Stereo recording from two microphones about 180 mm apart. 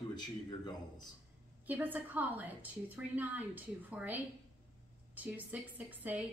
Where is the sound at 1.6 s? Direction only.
10° right (ahead or behind).